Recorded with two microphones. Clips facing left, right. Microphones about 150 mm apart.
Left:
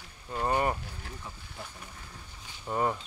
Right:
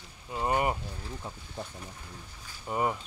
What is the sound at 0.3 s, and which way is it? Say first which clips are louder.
Speech: even; 15° right (ahead or behind).